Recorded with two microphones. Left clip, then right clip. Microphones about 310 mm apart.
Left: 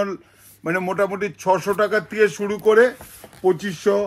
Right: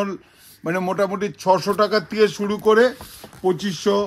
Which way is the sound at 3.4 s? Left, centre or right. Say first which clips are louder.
Left 2 dB; right.